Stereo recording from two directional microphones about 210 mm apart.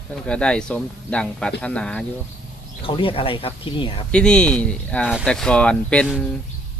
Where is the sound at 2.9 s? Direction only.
25° left (ahead or behind).